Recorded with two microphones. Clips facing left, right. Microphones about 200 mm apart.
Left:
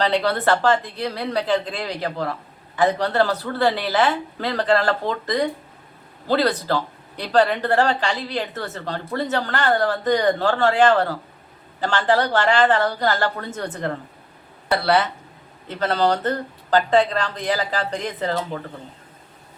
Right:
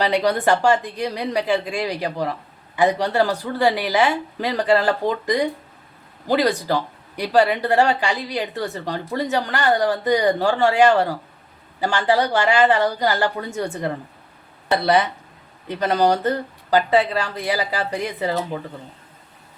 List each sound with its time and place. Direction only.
0.0 s speech: 15° right (ahead or behind)